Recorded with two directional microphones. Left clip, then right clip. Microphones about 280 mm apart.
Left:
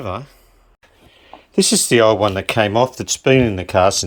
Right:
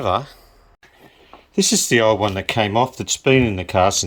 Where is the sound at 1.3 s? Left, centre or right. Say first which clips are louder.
Left 2 dB; centre.